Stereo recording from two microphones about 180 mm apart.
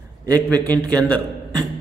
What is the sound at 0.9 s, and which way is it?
Speech, 5° left (ahead or behind).